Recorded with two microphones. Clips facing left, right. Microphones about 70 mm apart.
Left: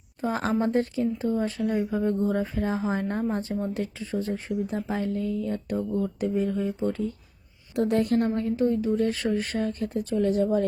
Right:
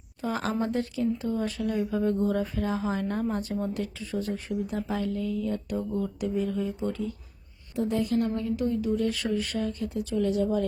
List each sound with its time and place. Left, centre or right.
0.2 s a woman's voice: left
7.8 s a woman's voice: left
8.4 s speech: left